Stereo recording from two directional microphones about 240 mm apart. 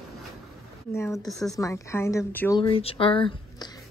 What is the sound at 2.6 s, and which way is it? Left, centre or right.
Speech, left.